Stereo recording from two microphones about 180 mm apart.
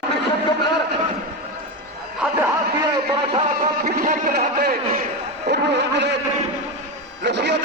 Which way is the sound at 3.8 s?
45° right (ahead or behind).